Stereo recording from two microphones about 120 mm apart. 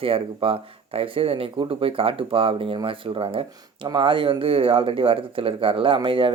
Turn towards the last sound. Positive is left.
turn(degrees=-45)  # may be behind; listen again after turning